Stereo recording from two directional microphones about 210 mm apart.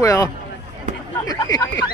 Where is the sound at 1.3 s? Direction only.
15° left (ahead or behind).